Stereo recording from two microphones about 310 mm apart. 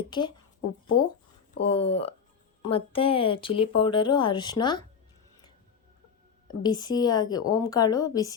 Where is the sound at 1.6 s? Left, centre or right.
Centre.